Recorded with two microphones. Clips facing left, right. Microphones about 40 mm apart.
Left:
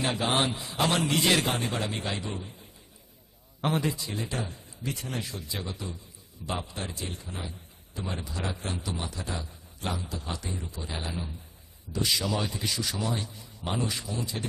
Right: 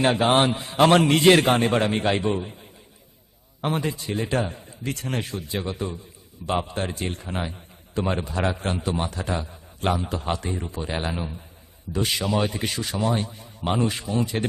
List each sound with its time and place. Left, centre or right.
0.0 s speech: right
3.8 s speech: right